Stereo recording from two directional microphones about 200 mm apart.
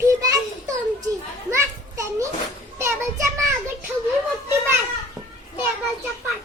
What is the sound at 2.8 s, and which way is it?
Child singing, 15° right (ahead or behind).